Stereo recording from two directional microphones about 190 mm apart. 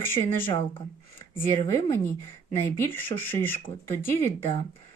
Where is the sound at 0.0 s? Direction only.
10° left (ahead or behind).